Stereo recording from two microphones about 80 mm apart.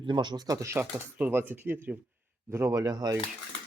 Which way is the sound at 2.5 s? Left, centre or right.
Right.